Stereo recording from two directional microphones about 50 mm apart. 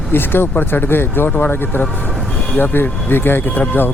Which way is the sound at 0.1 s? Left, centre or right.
Left.